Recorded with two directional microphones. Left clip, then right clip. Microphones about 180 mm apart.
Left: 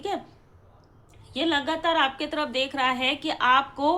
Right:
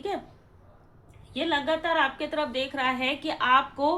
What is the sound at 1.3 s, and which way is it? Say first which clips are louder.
A woman's voice: left 1 dB; 20° left (ahead or behind).